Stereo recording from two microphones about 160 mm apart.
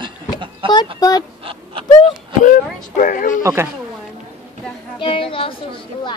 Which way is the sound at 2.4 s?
60° left (ahead or behind).